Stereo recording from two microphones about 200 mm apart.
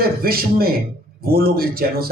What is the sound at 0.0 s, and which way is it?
A man's voice, 50° right (ahead or behind).